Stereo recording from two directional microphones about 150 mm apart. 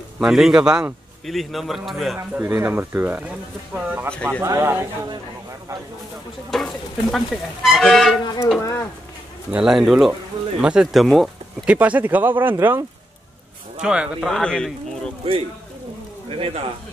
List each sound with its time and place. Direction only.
0.2 s a man's voice: 5° right (ahead or behind)
2.1 s speech: 15° right (ahead or behind)
4.1 s a man's voice: 5° left (ahead or behind)
4.4 s speech: 20° right (ahead or behind)
6.5 s a man's voice: centre (ahead or behind)
8.5 s speech: 20° left (ahead or behind)
9.5 s a man's voice: 5° right (ahead or behind)
13.8 s a man's voice: 5° right (ahead or behind)
14.4 s a man's voice: 5° left (ahead or behind)
16.3 s speech: 40° right (ahead or behind)